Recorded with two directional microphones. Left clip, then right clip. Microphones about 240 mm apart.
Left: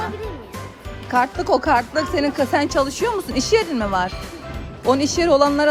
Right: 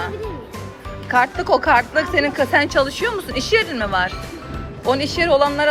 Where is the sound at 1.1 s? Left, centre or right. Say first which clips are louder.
Right 2 dB; left.